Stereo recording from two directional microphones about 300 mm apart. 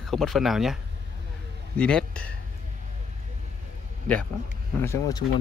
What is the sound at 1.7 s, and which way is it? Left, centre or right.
Speech, centre.